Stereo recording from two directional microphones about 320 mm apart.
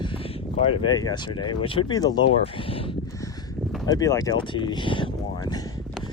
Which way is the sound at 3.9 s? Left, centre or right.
Centre.